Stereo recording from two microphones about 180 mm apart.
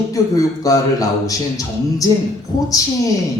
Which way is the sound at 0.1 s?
20° left (ahead or behind).